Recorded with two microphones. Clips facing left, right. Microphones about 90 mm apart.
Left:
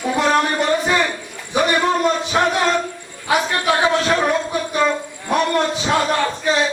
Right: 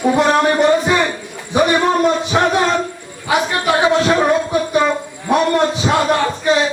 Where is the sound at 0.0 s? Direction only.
15° right (ahead or behind).